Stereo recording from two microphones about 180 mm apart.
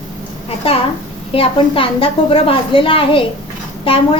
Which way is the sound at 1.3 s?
30° left (ahead or behind).